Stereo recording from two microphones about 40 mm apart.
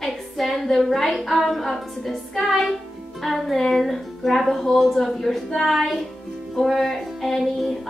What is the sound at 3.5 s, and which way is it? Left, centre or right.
A woman's voice, centre.